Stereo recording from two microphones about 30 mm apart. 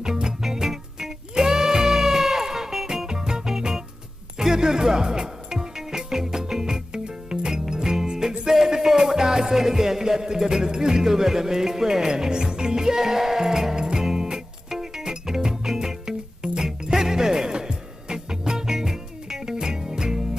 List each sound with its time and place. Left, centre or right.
0.0 s music: right
0.4 s music: centre